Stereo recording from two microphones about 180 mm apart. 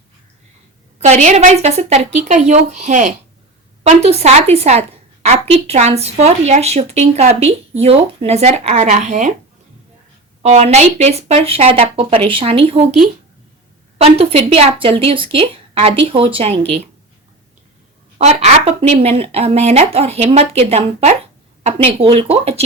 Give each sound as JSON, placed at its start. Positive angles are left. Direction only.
{"t": 0.9, "sound": "a woman's voice", "side_deg": -40}
{"t": 10.4, "sound": "a woman's voice", "side_deg": -40}
{"t": 14.0, "sound": "a woman's voice", "side_deg": -35}
{"t": 18.2, "sound": "a woman's voice", "side_deg": -40}